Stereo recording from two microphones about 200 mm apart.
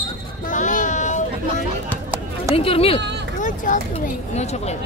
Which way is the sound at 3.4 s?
40° left (ahead or behind).